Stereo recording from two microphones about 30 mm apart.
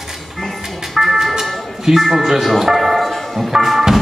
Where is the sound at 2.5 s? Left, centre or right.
Centre.